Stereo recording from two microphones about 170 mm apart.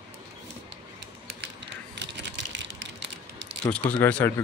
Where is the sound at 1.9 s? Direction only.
90° right.